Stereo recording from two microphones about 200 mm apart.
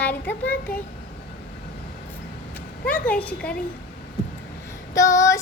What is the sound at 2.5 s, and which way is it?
Speech, 5° left (ahead or behind).